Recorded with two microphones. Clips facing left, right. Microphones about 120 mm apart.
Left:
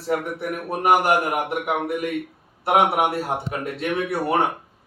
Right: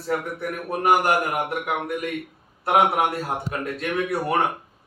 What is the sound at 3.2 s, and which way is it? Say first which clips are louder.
A man's voice: left 1 dB; 25° left (ahead or behind).